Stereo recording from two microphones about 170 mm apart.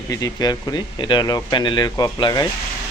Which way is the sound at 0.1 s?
20° left (ahead or behind).